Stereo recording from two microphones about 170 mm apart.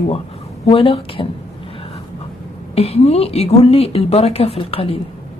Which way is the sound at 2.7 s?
35° left (ahead or behind).